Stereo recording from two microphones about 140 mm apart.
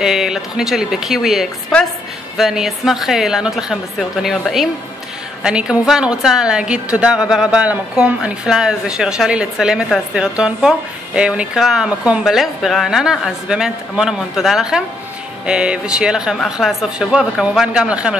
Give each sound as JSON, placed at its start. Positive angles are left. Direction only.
{"t": 0.0, "sound": "a woman's voice", "side_deg": -5}